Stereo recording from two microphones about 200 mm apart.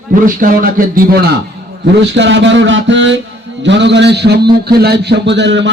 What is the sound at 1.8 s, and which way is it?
Speech, 65° right (ahead or behind).